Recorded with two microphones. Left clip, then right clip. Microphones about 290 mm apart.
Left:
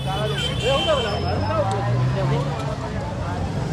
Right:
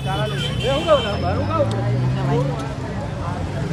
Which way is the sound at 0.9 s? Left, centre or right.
Right.